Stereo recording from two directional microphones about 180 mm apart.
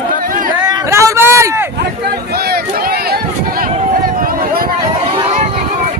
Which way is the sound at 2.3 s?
60° right (ahead or behind).